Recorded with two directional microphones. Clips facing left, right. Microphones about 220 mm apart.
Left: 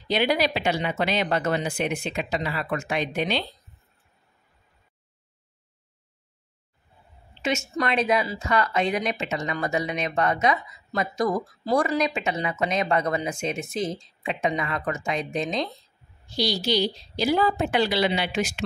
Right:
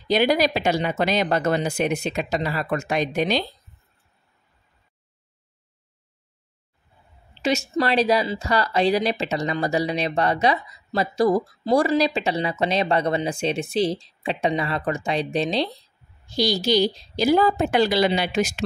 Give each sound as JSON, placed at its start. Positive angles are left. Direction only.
{"t": 0.1, "sound": "speech", "side_deg": -40}
{"t": 7.4, "sound": "speech", "side_deg": -35}
{"t": 16.3, "sound": "a woman's voice", "side_deg": -45}